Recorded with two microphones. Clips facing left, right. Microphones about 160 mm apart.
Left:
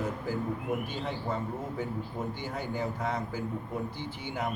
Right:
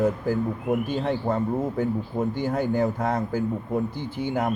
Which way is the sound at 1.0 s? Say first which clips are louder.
Right 9 dB; 55° right (ahead or behind).